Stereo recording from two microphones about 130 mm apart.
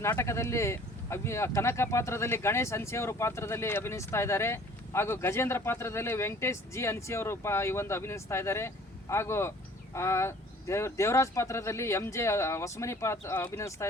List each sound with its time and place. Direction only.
0.0 s speech: 20° left (ahead or behind)